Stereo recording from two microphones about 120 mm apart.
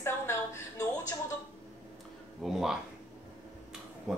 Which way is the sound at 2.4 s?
5° right (ahead or behind).